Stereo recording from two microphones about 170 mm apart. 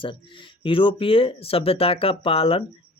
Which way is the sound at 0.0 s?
30° left (ahead or behind).